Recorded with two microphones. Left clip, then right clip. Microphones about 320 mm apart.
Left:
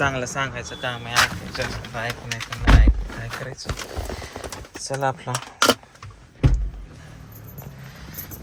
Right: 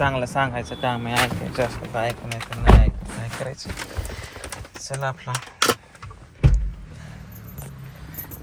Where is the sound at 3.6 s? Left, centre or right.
Centre.